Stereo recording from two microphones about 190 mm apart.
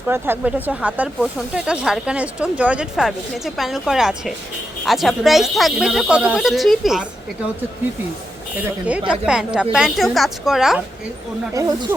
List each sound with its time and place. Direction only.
0.1 s speech: 10° right (ahead or behind)
8.9 s speech: 5° right (ahead or behind)
11.5 s speech: 15° right (ahead or behind)